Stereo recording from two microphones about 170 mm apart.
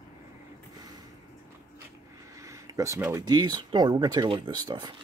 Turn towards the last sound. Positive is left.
turn(degrees=-25)  # may be behind; listen again after turning